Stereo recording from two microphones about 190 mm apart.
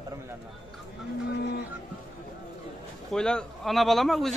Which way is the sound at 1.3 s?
60° left (ahead or behind).